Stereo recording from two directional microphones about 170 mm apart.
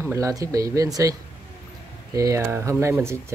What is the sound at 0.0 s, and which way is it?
Speech, 15° right (ahead or behind).